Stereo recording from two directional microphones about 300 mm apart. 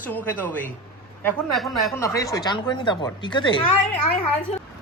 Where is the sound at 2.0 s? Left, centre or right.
Centre.